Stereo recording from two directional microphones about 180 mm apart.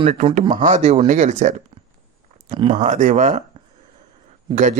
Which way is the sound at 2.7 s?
40° right (ahead or behind).